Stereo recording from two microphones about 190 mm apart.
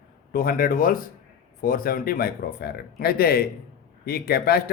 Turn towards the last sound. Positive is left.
turn(degrees=55)  # may be behind; listen again after turning